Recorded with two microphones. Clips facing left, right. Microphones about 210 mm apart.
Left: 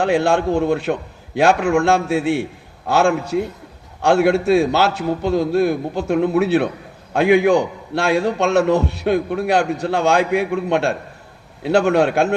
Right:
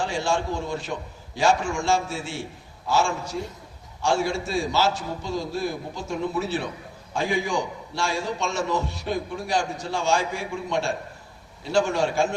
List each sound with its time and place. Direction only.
0.0 s a man's voice: 60° left (ahead or behind)